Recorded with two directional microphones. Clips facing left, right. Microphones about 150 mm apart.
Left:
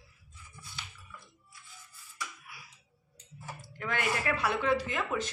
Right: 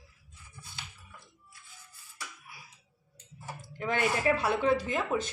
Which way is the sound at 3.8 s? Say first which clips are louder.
Right 4 dB; 25° right (ahead or behind).